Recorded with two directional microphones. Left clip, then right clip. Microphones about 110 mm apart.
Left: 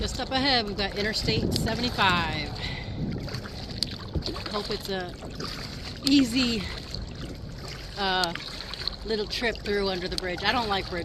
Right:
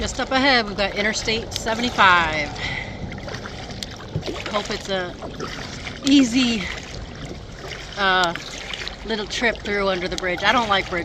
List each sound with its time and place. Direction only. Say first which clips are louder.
0.0 s speech: right 7 dB; 25° right (ahead or behind)
4.3 s speech: right 7 dB; 35° left (ahead or behind)
4.7 s speech: right 6 dB; 30° right (ahead or behind)
6.1 s speech: right 6 dB; 25° right (ahead or behind)
7.9 s speech: right 8 dB; 25° right (ahead or behind)